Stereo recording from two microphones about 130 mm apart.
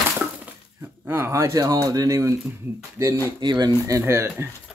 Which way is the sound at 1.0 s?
20° right (ahead or behind).